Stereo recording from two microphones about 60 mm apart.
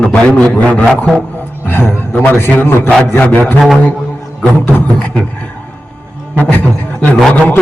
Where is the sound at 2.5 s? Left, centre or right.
Left.